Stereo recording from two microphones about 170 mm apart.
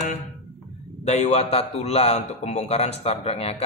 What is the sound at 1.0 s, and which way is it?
A man's voice, 40° left (ahead or behind).